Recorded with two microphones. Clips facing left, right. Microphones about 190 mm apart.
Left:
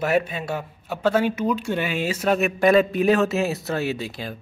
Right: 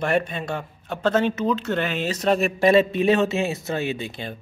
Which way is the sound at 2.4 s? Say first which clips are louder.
Left 2 dB; 30° right (ahead or behind).